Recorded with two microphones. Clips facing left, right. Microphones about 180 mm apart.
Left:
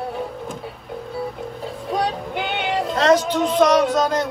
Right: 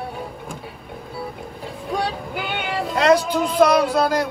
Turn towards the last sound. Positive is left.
turn(degrees=-10)  # may be behind; listen again after turning